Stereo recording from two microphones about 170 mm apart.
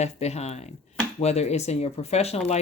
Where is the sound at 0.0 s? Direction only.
40° left (ahead or behind).